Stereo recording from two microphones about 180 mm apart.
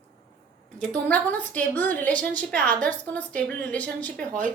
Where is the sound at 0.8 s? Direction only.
5° left (ahead or behind).